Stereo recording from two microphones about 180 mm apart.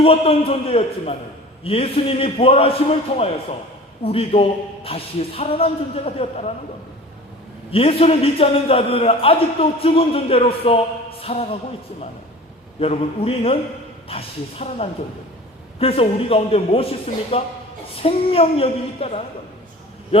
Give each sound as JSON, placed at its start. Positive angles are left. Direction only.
{"t": 0.0, "sound": "a man's voice", "side_deg": 30}
{"t": 7.7, "sound": "a man's voice", "side_deg": 30}
{"t": 11.2, "sound": "music", "side_deg": 35}
{"t": 12.8, "sound": "a man's voice", "side_deg": 30}